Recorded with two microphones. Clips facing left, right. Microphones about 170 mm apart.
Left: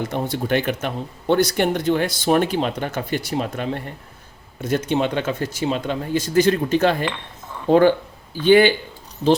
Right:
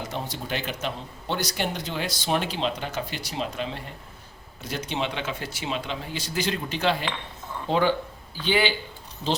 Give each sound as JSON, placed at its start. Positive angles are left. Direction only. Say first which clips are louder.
{"t": 0.1, "sound": "speech", "louder": "left 10 dB", "side_deg": 55}